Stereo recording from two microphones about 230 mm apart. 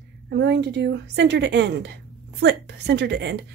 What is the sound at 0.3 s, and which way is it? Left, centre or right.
A woman's voice, right.